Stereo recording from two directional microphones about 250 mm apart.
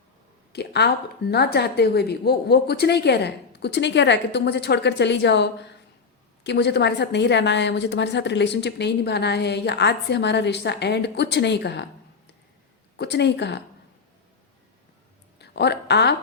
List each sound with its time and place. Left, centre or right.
0.5 s a woman's voice: left
13.0 s a woman's voice: left
15.4 s speech: left